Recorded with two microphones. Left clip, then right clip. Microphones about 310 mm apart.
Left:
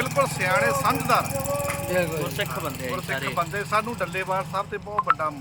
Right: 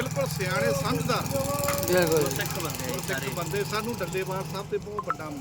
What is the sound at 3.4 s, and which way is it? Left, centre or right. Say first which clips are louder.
Speech: left 5 dB; centre.